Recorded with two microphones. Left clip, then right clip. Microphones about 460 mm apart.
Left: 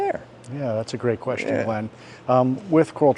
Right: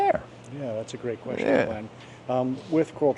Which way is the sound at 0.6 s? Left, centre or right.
Left.